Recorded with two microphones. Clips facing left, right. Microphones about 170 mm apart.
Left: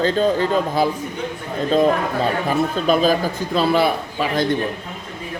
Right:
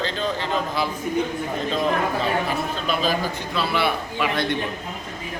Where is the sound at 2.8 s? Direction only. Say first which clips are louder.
Left 6 dB; 45° left (ahead or behind).